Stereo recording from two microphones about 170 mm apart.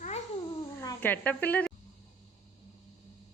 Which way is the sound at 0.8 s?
15° left (ahead or behind).